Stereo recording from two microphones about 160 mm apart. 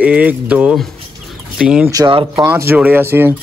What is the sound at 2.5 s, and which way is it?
Speech, 10° right (ahead or behind).